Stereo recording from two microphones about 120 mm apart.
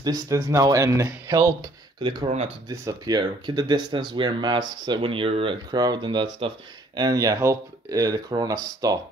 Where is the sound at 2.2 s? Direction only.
55° right (ahead or behind).